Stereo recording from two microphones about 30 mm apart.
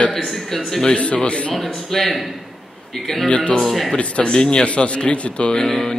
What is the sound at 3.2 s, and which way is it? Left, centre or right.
Speech, left.